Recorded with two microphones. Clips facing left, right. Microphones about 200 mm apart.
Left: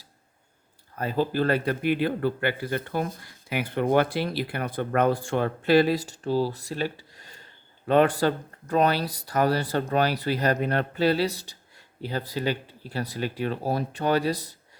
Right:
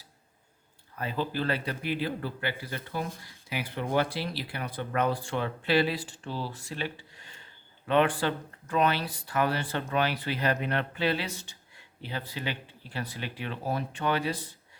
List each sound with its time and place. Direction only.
0.9 s a man's voice: 45° left (ahead or behind)